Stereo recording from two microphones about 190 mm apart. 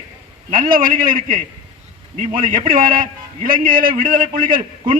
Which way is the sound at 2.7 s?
45° right (ahead or behind).